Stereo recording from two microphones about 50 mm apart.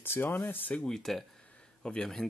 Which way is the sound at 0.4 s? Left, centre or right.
Left.